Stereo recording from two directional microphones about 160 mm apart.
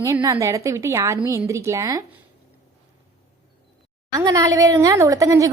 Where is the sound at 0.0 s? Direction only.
20° right (ahead or behind).